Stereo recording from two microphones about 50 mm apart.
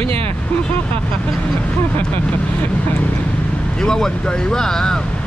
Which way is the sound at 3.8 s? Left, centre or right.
Centre.